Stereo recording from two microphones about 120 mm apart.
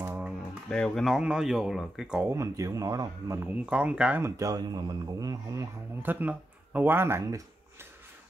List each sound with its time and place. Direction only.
0.7 s speech: 5° left (ahead or behind)
2.2 s speech: 25° right (ahead or behind)
3.3 s speech: 15° right (ahead or behind)
4.2 s speech: 30° right (ahead or behind)
6.0 s speech: 15° right (ahead or behind)